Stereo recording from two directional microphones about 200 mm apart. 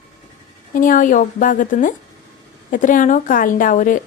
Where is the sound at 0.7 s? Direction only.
40° left (ahead or behind).